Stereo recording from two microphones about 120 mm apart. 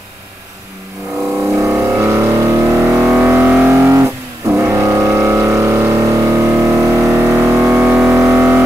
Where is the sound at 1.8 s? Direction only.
20° right (ahead or behind).